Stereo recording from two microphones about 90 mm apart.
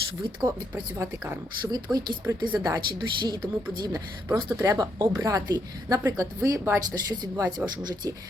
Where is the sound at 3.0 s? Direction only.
55° right (ahead or behind).